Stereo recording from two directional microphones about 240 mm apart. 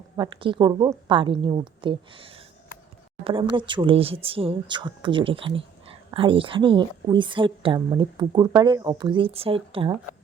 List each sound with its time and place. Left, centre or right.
0.2 s speech: right
3.5 s speech: centre